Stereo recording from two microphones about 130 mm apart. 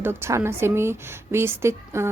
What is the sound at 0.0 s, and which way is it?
A woman's voice, 20° right (ahead or behind).